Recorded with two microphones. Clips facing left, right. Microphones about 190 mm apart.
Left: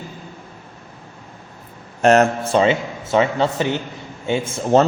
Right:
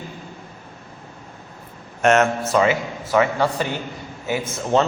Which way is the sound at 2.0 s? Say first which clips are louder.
Left 3 dB; 35° left (ahead or behind).